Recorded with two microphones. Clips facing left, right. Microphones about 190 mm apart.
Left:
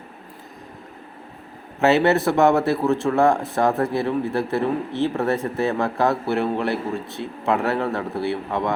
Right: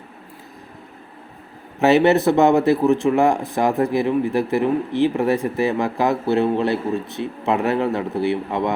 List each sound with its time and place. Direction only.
1.8 s speech: 15° right (ahead or behind)